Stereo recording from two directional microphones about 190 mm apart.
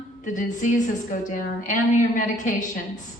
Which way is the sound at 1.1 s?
45° left (ahead or behind).